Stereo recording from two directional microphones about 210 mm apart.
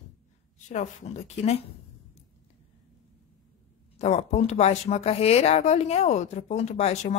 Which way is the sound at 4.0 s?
30° left (ahead or behind).